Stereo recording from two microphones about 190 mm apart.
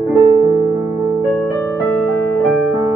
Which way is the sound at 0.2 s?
25° right (ahead or behind).